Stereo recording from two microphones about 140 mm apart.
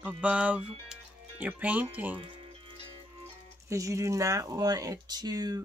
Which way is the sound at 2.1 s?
40° right (ahead or behind).